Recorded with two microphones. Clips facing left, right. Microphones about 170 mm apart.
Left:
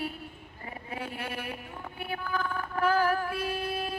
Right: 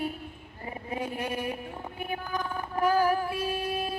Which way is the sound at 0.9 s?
15° right (ahead or behind).